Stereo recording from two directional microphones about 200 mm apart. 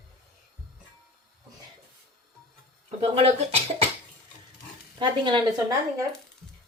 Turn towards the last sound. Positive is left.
turn(degrees=-20)  # may be behind; listen again after turning